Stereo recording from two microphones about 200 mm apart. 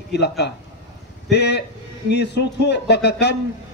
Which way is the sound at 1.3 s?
55° left (ahead or behind).